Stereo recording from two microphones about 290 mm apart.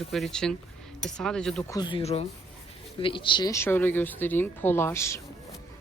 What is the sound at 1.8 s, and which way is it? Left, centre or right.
Speech, centre.